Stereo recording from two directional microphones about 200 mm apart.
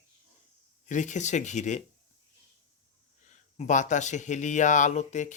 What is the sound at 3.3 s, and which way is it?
Speech, 35° left (ahead or behind).